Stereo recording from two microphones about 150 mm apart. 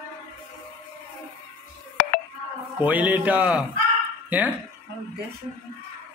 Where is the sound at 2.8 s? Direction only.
10° right (ahead or behind).